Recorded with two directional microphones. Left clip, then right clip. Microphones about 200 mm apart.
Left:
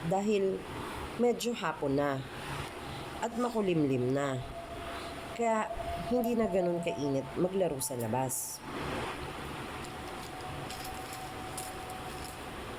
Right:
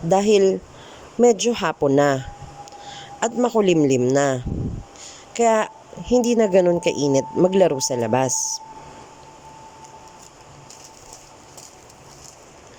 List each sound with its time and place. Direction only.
0.1 s speech: 50° right (ahead or behind)
5.4 s speech: 50° right (ahead or behind)